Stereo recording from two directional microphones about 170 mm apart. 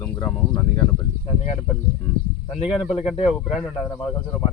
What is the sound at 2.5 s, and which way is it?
Speech, centre (ahead or behind).